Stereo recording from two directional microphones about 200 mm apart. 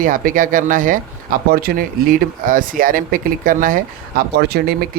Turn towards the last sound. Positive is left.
turn(degrees=-50)  # may be behind; listen again after turning